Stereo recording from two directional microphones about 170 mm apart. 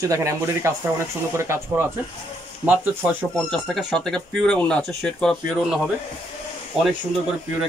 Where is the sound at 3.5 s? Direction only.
5° right (ahead or behind).